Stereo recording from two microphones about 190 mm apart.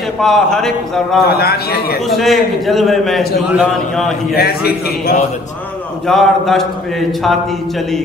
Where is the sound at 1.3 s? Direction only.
55° left (ahead or behind).